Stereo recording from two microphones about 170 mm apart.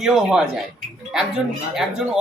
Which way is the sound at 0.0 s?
5° right (ahead or behind).